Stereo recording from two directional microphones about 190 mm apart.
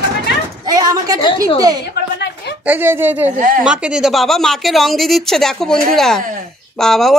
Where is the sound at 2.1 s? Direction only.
65° left (ahead or behind).